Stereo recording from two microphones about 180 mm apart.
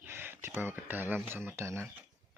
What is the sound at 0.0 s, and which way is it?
Speech, 10° right (ahead or behind).